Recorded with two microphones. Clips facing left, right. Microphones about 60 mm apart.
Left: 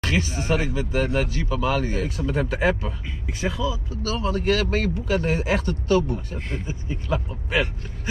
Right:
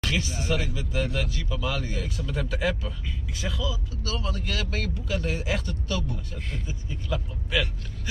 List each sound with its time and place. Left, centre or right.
0.0 s speech: left